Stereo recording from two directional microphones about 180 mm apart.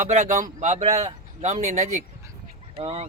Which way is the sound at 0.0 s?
40° right (ahead or behind).